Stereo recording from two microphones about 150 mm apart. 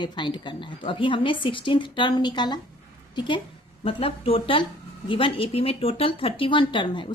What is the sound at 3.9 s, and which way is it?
Speech, 40° left (ahead or behind).